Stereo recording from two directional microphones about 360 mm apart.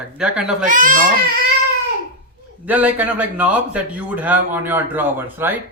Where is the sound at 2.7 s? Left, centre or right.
Centre.